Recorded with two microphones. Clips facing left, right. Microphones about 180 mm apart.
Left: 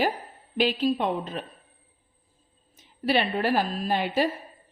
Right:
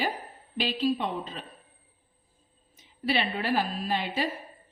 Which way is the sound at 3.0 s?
45° left (ahead or behind).